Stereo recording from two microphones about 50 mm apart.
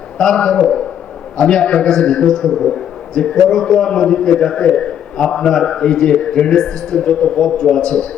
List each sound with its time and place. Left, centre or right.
0.2 s a man's voice: centre
7.4 s a man's voice: centre